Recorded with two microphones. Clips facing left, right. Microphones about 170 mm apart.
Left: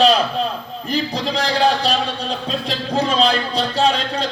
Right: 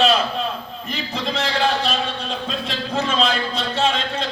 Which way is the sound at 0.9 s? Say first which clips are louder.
Left 5 dB; 35° left (ahead or behind).